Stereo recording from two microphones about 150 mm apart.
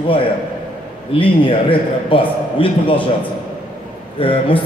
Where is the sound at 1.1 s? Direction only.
35° left (ahead or behind).